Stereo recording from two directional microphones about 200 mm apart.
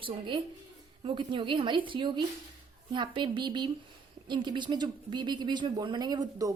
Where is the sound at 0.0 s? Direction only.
25° right (ahead or behind).